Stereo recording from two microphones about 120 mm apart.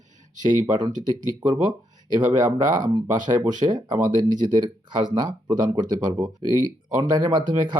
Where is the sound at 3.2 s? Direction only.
35° right (ahead or behind).